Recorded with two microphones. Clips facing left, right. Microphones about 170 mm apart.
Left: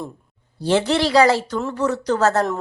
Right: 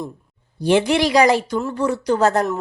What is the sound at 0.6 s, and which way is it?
Speech, 15° right (ahead or behind).